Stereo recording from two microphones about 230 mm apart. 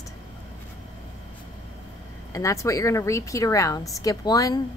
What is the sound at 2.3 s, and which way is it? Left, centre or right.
A woman's voice, centre.